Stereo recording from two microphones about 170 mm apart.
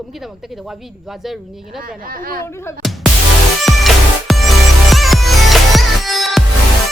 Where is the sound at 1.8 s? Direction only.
55° right (ahead or behind).